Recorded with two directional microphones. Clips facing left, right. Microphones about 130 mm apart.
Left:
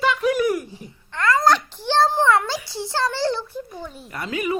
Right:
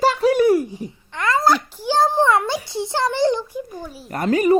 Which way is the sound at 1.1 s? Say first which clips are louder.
Even; 20° right (ahead or behind).